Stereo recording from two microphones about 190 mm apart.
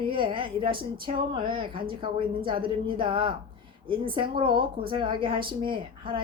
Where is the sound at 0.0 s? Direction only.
25° right (ahead or behind).